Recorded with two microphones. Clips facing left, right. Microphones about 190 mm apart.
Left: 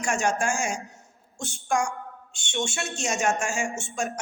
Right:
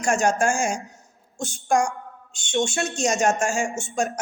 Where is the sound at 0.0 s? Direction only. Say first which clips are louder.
Right 5 dB; 40° right (ahead or behind).